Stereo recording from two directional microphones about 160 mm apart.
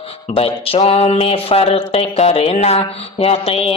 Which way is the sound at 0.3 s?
35° left (ahead or behind).